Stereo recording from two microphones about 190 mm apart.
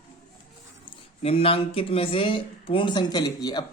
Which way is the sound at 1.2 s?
30° left (ahead or behind).